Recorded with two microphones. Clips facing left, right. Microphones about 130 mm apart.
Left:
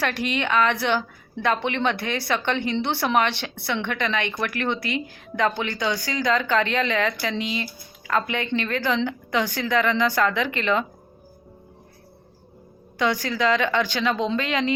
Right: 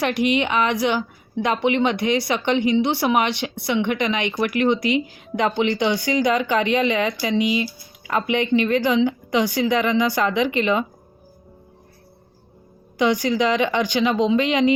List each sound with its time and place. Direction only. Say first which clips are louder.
0.0 s a woman's voice: right 5 dB; 15° right (ahead or behind)
13.0 s a woman's voice: right 4 dB; 15° right (ahead or behind)